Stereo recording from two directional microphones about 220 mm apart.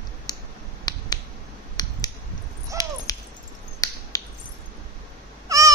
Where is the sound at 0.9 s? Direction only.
20° left (ahead or behind).